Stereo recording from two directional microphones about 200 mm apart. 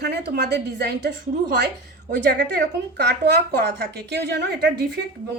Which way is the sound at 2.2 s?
55° right (ahead or behind).